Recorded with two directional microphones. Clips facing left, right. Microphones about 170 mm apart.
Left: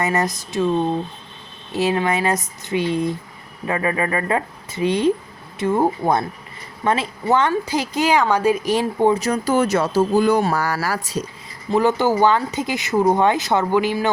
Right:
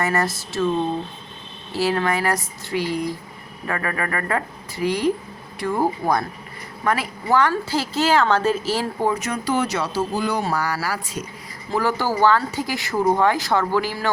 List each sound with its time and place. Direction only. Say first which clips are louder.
0.0 s speech: left 1 dB; 20° left (ahead or behind)
1.7 s speech: left 2 dB; 20° left (ahead or behind)
9.2 s speech: left 4 dB; 40° left (ahead or behind)
11.7 s speech: left 5 dB; 20° left (ahead or behind)